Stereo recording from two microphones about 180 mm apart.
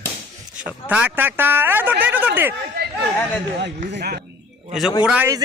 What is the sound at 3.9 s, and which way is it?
Speech, 60° right (ahead or behind).